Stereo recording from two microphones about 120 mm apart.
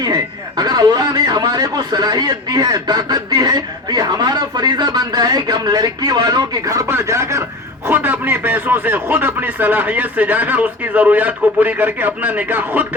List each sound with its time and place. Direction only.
0.0 s a man's voice: 35° right (ahead or behind); by 12.9 s 15° right (ahead or behind)